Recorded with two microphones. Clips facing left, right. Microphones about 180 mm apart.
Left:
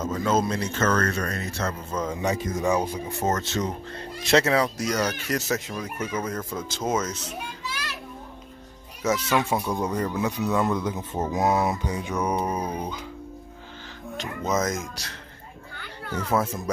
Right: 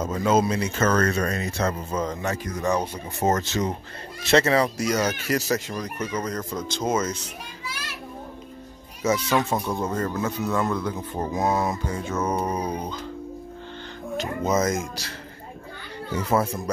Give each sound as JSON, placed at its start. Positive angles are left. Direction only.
{"t": 0.0, "sound": "speech", "side_deg": -5}
{"t": 2.0, "sound": "speech", "side_deg": 10}
{"t": 3.3, "sound": "speech", "side_deg": -10}
{"t": 9.3, "sound": "speech", "side_deg": 10}
{"t": 14.4, "sound": "speech", "side_deg": 0}
{"t": 16.3, "sound": "speech", "side_deg": 0}